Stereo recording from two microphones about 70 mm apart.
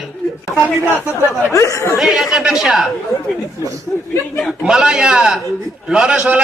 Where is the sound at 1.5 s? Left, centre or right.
Left.